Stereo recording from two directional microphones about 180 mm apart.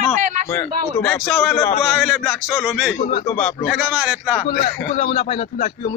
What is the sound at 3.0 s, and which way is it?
Speech, 35° left (ahead or behind).